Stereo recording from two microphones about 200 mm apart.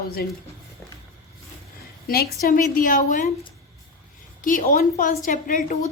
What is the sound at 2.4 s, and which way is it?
Speech, 45° left (ahead or behind).